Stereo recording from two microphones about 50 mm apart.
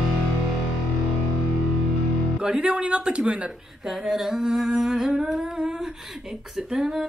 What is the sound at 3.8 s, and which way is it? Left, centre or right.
Speech, centre.